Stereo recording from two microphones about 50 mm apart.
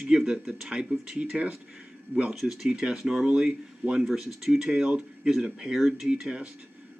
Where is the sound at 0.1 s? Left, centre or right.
Centre.